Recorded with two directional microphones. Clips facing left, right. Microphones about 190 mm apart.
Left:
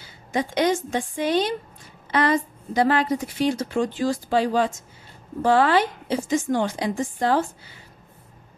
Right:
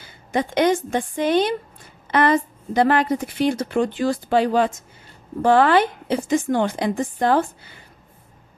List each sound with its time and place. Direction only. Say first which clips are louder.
0.0 s a woman's voice: right 2 dB; 55° right (ahead or behind)